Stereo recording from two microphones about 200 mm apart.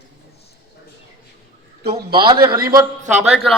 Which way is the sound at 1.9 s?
25° right (ahead or behind).